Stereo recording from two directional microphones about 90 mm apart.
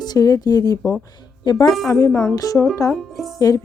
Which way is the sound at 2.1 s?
10° left (ahead or behind).